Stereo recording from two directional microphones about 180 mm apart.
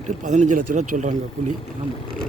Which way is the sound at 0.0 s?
40° right (ahead or behind).